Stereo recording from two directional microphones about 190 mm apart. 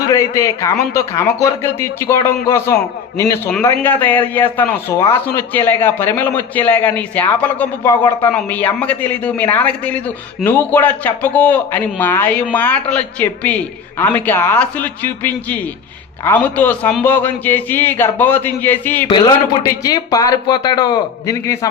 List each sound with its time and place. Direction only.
0.1 s a man's voice: 15° left (ahead or behind)